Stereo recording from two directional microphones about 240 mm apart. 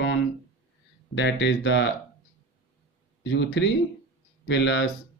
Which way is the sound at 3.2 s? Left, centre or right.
Left.